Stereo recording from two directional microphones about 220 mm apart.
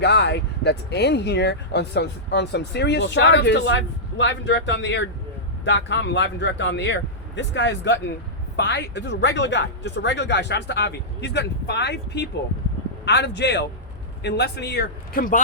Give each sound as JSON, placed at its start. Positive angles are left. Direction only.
{"t": 0.0, "sound": "speech", "side_deg": 50}